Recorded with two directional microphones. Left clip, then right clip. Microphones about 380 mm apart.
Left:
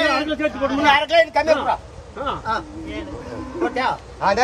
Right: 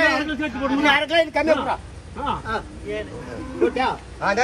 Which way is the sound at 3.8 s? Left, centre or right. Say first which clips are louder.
Left 2 dB; left.